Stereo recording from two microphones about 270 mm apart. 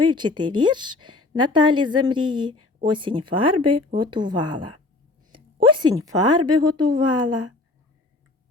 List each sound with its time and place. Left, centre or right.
0.0 s speech: centre